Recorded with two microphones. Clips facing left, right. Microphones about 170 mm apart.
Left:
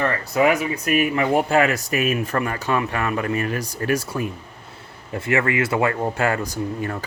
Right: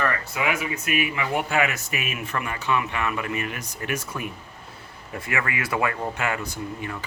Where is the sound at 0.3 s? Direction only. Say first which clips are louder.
Left 8 dB; 40° left (ahead or behind).